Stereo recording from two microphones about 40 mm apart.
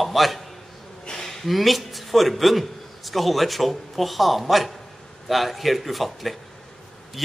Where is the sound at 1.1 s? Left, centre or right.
Centre.